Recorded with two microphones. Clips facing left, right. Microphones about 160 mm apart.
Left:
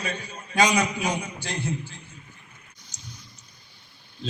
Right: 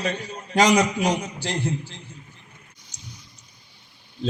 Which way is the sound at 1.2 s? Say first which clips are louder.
Right 4 dB; 35° right (ahead or behind).